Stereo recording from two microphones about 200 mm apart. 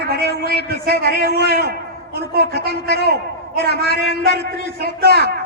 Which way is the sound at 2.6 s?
55° left (ahead or behind).